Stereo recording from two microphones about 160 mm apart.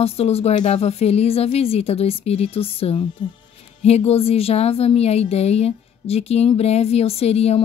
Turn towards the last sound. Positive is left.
turn(degrees=40)  # may be behind; listen again after turning